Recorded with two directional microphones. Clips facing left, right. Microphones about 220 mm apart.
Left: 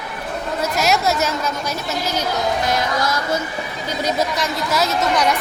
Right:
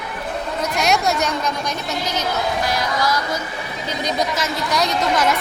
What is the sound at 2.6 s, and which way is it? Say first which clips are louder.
Speech: left 1 dB; 25° left (ahead or behind).